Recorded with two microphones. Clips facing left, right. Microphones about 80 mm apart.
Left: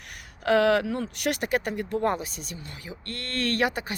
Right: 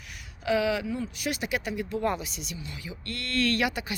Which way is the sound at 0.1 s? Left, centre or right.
Left.